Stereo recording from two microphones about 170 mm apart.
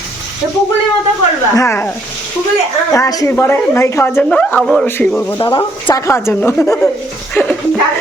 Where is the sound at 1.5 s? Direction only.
15° left (ahead or behind).